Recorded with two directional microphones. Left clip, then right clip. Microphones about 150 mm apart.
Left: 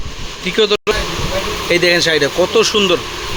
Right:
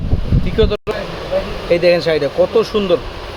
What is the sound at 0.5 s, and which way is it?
Speech, 5° right (ahead or behind).